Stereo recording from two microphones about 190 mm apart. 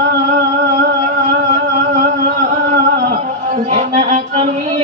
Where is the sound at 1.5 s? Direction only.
40° right (ahead or behind).